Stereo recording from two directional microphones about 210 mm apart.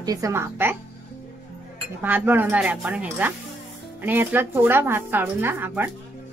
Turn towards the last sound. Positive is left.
turn(degrees=-10)  # may be behind; listen again after turning